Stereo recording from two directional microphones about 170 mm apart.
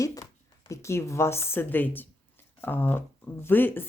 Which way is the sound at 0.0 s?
20° left (ahead or behind).